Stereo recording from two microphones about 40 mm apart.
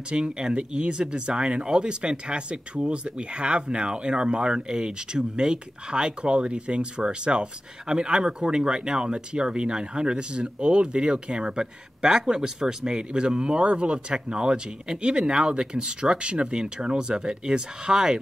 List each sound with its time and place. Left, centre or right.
0.1 s speech: centre